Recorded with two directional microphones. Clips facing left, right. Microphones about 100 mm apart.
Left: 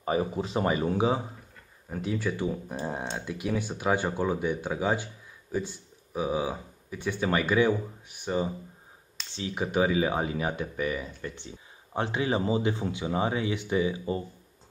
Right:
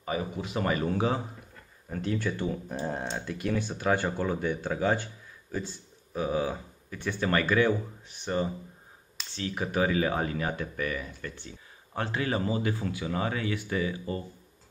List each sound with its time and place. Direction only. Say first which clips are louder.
0.0 s speech: left 4 dB; 35° left (ahead or behind)
0.7 s speech: left 1 dB; 20° left (ahead or behind)